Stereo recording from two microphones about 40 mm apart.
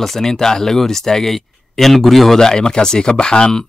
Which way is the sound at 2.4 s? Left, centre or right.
Centre.